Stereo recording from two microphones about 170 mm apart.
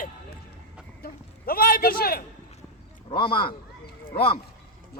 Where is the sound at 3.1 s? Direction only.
30° left (ahead or behind).